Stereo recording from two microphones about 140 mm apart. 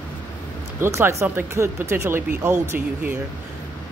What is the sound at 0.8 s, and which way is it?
Speech, 20° right (ahead or behind).